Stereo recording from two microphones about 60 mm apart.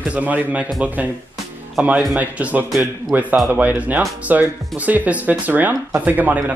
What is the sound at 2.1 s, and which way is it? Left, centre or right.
Speech, right.